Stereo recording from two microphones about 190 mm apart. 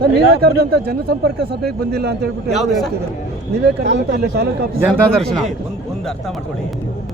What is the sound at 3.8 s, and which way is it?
Speech, 65° right (ahead or behind).